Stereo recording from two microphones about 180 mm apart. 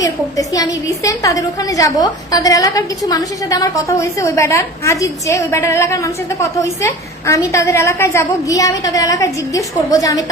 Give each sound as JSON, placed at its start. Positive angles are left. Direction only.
{"t": 0.0, "sound": "a woman's voice", "side_deg": 20}